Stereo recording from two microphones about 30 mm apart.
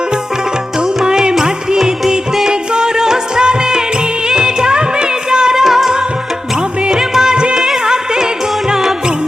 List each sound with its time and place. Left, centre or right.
1.0 s music: right
2.5 s music: right
5.6 s music: centre
6.9 s music: centre